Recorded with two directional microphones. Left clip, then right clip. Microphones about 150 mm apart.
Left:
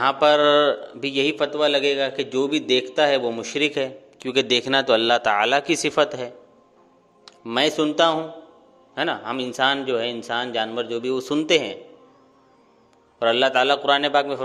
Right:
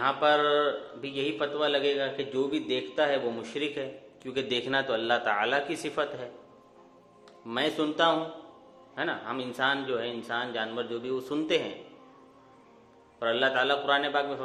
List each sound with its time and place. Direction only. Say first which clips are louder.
0.0 s a man's voice: left 8 dB; 80° left; by 8.2 s 60° left (ahead or behind)
9.0 s a man's voice: left 7 dB; 80° left
13.1 s a man's voice: left 8 dB; 65° left (ahead or behind)